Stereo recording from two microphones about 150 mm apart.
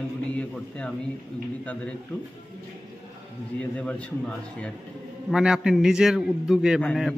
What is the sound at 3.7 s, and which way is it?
Speech, 5° left (ahead or behind).